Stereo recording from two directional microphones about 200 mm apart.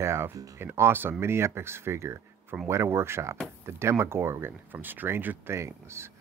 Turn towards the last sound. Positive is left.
turn(degrees=-15)  # may be behind; listen again after turning